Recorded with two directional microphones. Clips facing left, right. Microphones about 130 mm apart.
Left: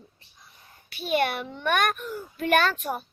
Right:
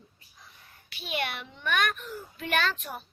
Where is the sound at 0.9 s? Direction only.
45° left (ahead or behind).